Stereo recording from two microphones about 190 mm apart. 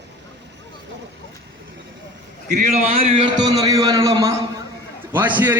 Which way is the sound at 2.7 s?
30° right (ahead or behind).